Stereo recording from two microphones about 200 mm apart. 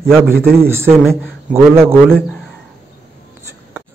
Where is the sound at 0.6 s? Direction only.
10° right (ahead or behind).